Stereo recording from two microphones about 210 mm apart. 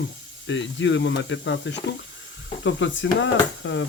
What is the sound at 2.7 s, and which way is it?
Speech, 65° left (ahead or behind).